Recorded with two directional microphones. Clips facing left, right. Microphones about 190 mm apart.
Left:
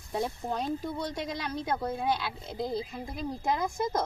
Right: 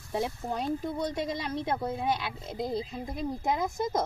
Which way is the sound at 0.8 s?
20° right (ahead or behind).